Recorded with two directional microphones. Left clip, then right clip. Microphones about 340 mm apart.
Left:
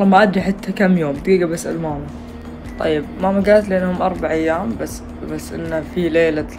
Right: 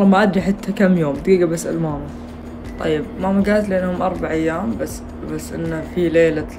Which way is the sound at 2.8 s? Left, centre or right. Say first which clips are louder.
Left 2 dB; centre.